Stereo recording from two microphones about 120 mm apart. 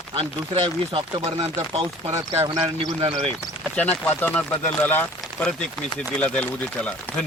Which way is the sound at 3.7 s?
15° left (ahead or behind).